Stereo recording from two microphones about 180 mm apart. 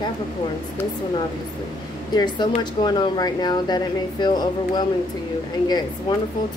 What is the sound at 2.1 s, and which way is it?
Speech, 25° left (ahead or behind).